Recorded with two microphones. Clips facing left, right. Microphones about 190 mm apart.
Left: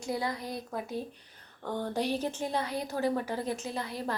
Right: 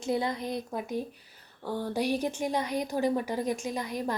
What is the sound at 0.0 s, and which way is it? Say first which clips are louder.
A woman's voice: right 4 dB; 25° right (ahead or behind).